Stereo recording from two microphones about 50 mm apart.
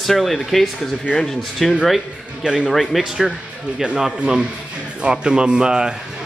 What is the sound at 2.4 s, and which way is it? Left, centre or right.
Speech, centre.